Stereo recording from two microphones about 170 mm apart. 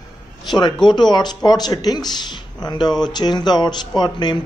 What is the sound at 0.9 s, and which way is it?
Speech, 25° left (ahead or behind).